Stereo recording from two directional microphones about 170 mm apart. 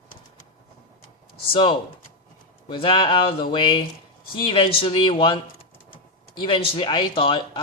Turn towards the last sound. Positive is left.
turn(degrees=30)  # may be behind; listen again after turning